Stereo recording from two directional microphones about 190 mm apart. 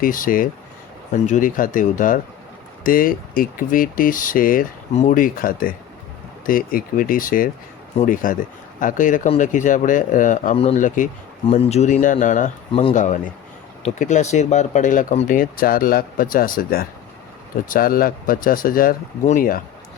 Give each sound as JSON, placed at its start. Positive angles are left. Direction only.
{"t": 0.0, "sound": "a man's voice", "side_deg": 45}